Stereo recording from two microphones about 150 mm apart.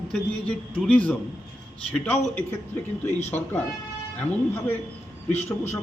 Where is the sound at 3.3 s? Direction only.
15° left (ahead or behind).